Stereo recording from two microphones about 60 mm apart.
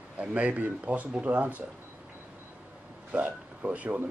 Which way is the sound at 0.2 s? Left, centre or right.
Right.